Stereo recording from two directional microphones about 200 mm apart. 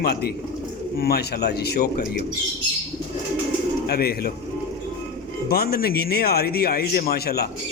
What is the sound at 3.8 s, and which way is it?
Speech, 50° left (ahead or behind).